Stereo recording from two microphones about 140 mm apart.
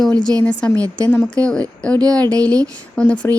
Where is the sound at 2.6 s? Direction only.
10° left (ahead or behind).